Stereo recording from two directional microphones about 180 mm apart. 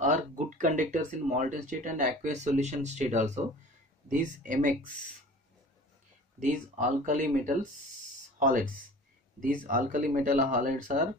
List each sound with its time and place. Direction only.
0.0 s speech: 45° right (ahead or behind)
6.4 s speech: 45° right (ahead or behind)